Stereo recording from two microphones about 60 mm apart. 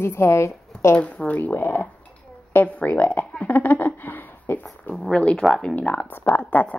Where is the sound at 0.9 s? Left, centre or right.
Left.